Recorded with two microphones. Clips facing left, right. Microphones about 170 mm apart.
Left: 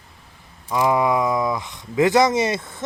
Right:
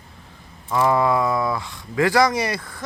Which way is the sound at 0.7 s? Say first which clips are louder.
Even; 15° left (ahead or behind).